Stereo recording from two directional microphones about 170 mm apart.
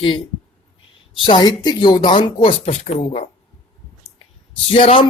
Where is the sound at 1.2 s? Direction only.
25° left (ahead or behind).